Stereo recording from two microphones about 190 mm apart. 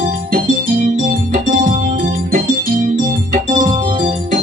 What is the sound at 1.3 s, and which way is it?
Music, 45° right (ahead or behind).